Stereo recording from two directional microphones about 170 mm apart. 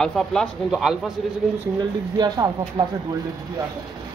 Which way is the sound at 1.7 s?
25° right (ahead or behind).